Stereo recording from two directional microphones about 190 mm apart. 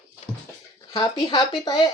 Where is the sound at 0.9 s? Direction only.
20° left (ahead or behind).